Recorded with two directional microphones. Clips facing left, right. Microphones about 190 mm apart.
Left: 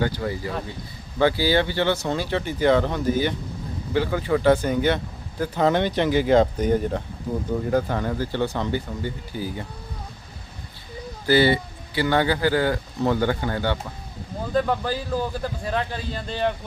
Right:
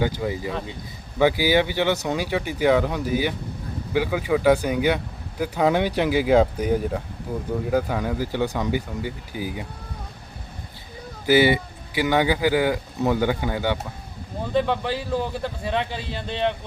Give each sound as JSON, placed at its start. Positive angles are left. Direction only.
{"t": 0.0, "sound": "a man's voice", "side_deg": -15}
{"t": 11.3, "sound": "a man's voice", "side_deg": -15}
{"t": 14.5, "sound": "a man's voice", "side_deg": 0}